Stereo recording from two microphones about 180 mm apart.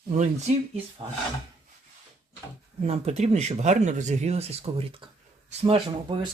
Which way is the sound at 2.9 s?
35° right (ahead or behind).